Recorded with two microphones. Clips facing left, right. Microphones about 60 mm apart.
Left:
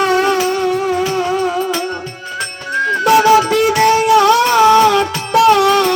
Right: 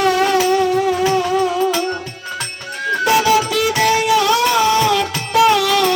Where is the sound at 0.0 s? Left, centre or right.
Left.